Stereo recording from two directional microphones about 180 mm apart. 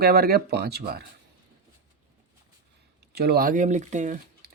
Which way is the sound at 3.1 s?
60° right (ahead or behind).